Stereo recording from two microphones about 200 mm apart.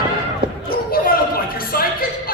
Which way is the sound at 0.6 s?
50° left (ahead or behind).